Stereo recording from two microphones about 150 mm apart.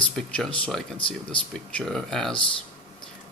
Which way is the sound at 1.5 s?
5° left (ahead or behind).